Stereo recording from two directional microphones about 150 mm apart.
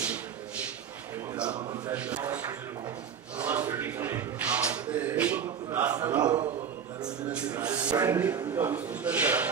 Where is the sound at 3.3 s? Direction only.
10° right (ahead or behind).